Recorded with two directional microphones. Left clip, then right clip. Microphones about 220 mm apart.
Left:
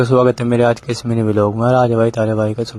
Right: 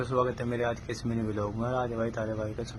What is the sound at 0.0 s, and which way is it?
A man's voice, 40° left (ahead or behind).